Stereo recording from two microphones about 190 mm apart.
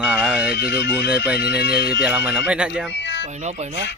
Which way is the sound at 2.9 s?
65° left (ahead or behind).